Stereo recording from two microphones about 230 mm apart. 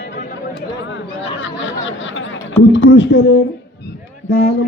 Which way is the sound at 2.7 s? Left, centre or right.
Left.